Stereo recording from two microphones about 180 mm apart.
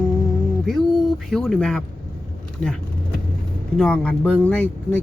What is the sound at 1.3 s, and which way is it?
Speech, 5° left (ahead or behind).